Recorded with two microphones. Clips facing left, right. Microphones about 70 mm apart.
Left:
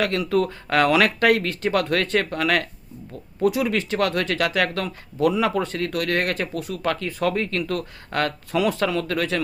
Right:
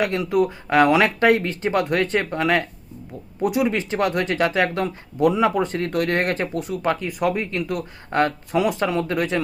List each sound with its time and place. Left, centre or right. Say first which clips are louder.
0.0 s speech: right 1 dB; right